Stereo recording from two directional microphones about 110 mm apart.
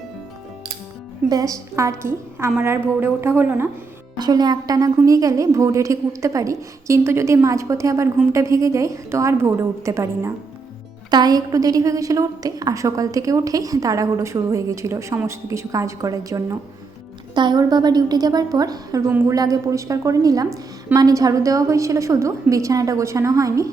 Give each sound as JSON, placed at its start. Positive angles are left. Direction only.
{"t": 1.3, "sound": "a woman's voice", "side_deg": -30}
{"t": 4.2, "sound": "a woman's voice", "side_deg": -40}
{"t": 11.1, "sound": "a woman's voice", "side_deg": -35}